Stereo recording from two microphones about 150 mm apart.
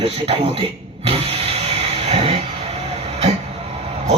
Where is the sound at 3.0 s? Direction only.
45° right (ahead or behind).